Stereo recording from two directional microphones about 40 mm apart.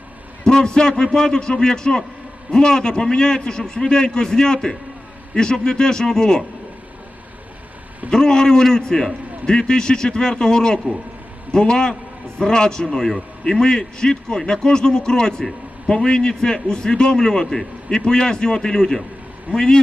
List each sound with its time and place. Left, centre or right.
0.4 s a man's voice: centre
8.1 s a man's voice: centre